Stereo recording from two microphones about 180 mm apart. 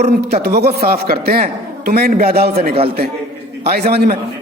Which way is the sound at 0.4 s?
60° right (ahead or behind).